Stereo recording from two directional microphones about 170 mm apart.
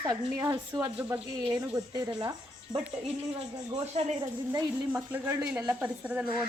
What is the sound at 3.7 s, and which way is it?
Speech, 40° right (ahead or behind).